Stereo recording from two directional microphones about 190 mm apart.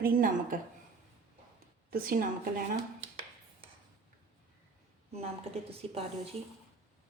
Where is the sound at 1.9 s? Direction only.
50° right (ahead or behind).